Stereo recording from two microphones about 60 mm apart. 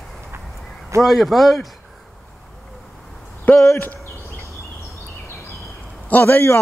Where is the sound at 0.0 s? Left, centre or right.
Centre.